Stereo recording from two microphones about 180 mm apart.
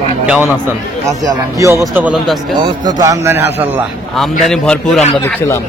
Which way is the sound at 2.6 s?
20° right (ahead or behind).